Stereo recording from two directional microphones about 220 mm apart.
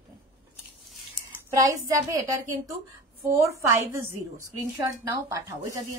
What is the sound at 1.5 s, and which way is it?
A woman's voice, 15° right (ahead or behind).